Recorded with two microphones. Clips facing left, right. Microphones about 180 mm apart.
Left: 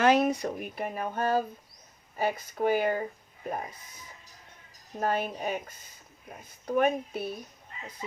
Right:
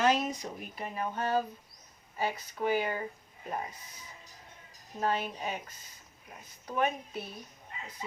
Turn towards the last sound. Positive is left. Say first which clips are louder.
# left 6 dB
turn(degrees=50)  # may be behind; listen again after turning